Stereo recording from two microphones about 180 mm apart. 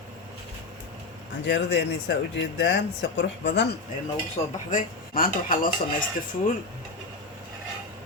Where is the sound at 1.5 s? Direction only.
75° left (ahead or behind).